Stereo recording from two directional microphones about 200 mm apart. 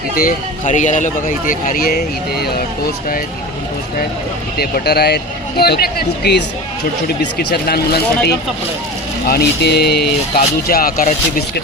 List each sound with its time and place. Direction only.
0.2 s speech: 40° left (ahead or behind)
4.5 s speech: 50° left (ahead or behind)
9.2 s speech: 55° left (ahead or behind)